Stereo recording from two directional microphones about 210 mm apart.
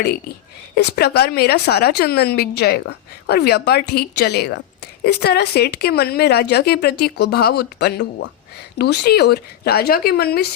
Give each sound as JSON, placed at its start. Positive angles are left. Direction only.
{"t": 0.8, "sound": "speech", "side_deg": 50}